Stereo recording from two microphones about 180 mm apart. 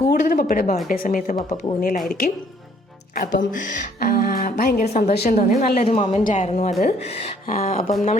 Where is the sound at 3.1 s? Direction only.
50° left (ahead or behind).